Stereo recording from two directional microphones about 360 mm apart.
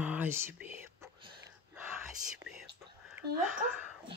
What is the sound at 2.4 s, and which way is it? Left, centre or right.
Whispering, centre.